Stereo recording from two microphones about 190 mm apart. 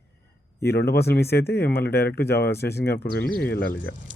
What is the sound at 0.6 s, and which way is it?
Speech, 55° left (ahead or behind).